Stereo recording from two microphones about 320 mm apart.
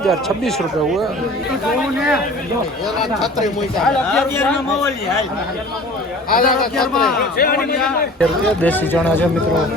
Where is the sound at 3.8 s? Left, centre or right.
Centre.